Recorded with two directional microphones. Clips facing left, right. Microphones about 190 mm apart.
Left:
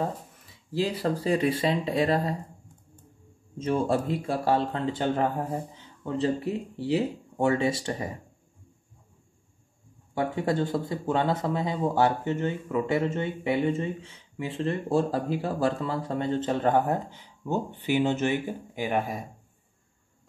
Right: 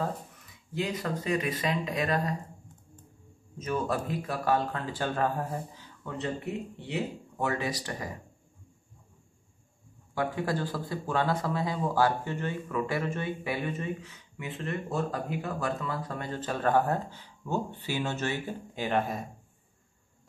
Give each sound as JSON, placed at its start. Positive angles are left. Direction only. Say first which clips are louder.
{"t": 0.7, "sound": "speech", "louder": "left 5 dB", "side_deg": 30}
{"t": 3.5, "sound": "speech", "louder": "left 5 dB", "side_deg": 30}
{"t": 10.1, "sound": "speech", "louder": "left 4 dB", "side_deg": 25}